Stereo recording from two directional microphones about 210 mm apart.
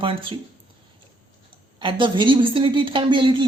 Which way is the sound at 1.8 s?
25° right (ahead or behind).